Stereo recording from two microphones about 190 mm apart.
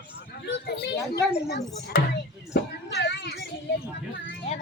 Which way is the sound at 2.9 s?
65° left (ahead or behind).